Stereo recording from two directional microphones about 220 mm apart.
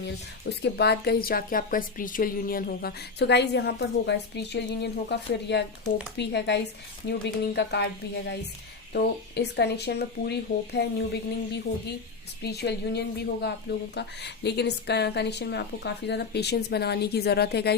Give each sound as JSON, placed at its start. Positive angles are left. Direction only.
{"t": 0.6, "sound": "speech", "side_deg": 50}
{"t": 8.9, "sound": "speech", "side_deg": 50}
{"t": 12.4, "sound": "speech", "side_deg": 50}